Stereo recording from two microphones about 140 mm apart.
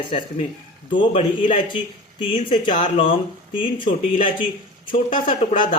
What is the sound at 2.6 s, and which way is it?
Speech, 65° left (ahead or behind).